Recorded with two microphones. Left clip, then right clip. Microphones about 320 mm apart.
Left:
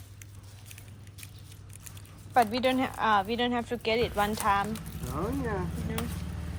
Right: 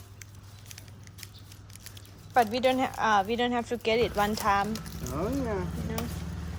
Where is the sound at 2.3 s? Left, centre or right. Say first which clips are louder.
Right 1 dB; centre.